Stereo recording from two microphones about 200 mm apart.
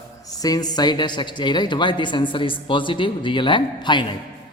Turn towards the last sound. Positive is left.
turn(degrees=25)  # may be behind; listen again after turning